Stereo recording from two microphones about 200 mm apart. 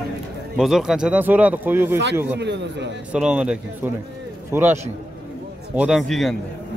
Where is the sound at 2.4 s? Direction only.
60° right (ahead or behind).